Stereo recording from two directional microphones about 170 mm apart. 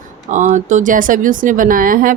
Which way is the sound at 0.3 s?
45° right (ahead or behind).